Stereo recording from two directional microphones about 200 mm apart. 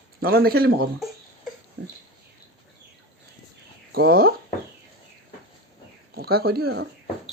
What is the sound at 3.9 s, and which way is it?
Speech, 50° right (ahead or behind).